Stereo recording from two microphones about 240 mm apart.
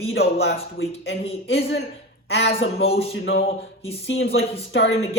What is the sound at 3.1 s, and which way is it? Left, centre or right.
Speech, left.